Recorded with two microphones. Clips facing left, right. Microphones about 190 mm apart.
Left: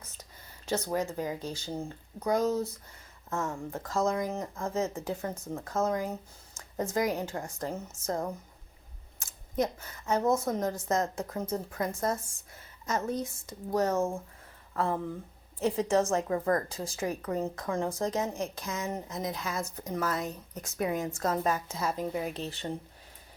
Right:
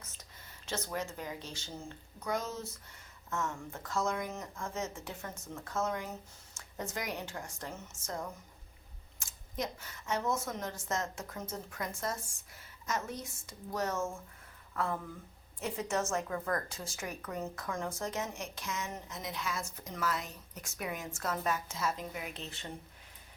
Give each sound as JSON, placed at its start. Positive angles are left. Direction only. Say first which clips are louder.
{"t": 0.6, "sound": "speech", "louder": "left 7 dB", "side_deg": 35}
{"t": 10.1, "sound": "speech", "louder": "left 7 dB", "side_deg": 35}
{"t": 13.7, "sound": "speech", "louder": "left 7 dB", "side_deg": 35}